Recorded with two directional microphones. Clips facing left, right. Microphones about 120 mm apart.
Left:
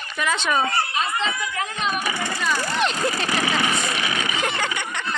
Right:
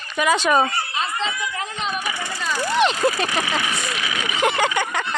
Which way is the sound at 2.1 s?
10° right (ahead or behind).